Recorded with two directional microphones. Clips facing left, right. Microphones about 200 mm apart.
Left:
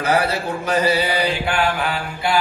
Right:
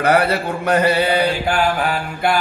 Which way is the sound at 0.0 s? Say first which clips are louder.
Right 3 dB; 60° right (ahead or behind).